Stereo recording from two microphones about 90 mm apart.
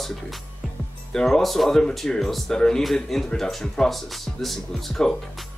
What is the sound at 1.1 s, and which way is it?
Speech, 5° left (ahead or behind).